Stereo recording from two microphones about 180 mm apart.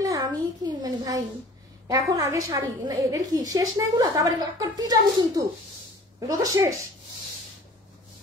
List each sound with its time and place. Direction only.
0.0 s a child's voice: 20° right (ahead or behind)